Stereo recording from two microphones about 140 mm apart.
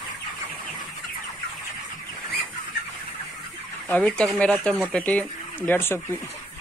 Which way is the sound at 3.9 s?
5° left (ahead or behind).